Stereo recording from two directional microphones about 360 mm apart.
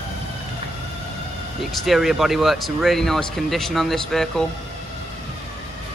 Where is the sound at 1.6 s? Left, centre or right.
Centre.